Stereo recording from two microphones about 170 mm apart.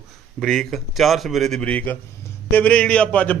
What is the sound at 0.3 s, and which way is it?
A man's voice, 5° left (ahead or behind).